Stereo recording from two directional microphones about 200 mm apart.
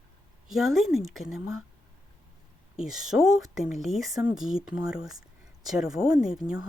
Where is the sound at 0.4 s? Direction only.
Centre (ahead or behind).